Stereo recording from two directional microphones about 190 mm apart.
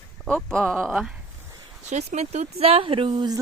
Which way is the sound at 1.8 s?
35° right (ahead or behind).